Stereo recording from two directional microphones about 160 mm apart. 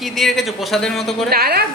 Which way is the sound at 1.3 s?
75° right (ahead or behind).